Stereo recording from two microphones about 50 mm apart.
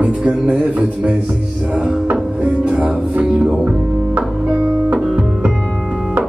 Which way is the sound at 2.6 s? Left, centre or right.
Right.